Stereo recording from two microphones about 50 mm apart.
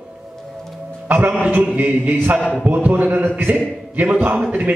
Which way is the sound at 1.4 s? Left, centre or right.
Right.